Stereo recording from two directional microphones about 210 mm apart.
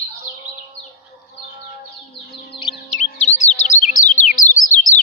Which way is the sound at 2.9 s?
35° left (ahead or behind).